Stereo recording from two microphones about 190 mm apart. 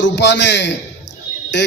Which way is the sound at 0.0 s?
65° left (ahead or behind).